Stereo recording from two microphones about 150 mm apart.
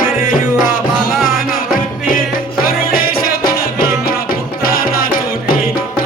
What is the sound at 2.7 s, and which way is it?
Music, 80° left.